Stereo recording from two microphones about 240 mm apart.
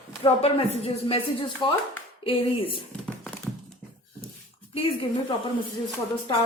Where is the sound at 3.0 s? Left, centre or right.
Centre.